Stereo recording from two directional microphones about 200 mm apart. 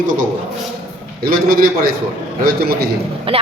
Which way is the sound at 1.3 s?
45° right (ahead or behind).